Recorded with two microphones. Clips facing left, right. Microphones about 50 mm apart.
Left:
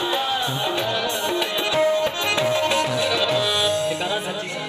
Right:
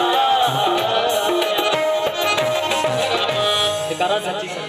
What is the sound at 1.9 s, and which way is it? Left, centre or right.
Tabla, right.